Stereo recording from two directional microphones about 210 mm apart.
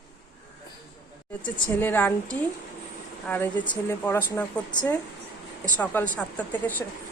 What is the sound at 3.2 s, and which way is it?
Speech, 10° left (ahead or behind).